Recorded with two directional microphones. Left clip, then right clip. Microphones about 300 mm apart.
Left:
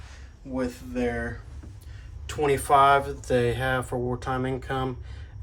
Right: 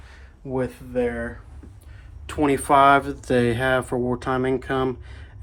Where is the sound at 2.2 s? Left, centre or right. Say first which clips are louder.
Right 3 dB; right.